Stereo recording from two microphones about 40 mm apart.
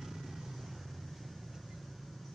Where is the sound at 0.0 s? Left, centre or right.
Centre.